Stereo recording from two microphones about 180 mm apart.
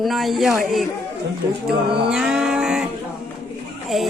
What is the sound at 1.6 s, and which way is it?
Mantra, 5° right (ahead or behind).